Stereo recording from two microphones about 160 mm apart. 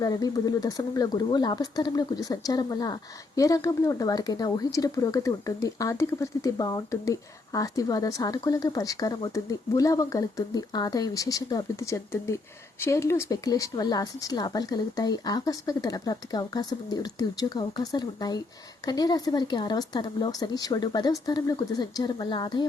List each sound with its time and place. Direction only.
0.0 s speech: 25° left (ahead or behind)